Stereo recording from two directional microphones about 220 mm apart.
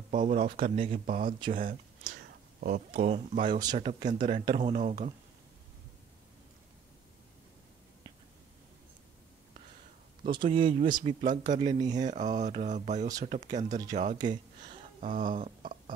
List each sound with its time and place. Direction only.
0.1 s speech: 40° right (ahead or behind)
0.7 s speech: 30° right (ahead or behind)
1.5 s a sound: 40° right (ahead or behind)
2.6 s speech: 35° right (ahead or behind)
3.5 s speech: 20° right (ahead or behind)
10.3 s speech: 20° right (ahead or behind)
11.1 s speech: 35° right (ahead or behind)
14.1 s speech: 20° right (ahead or behind)
15.0 s a sound: 35° right (ahead or behind)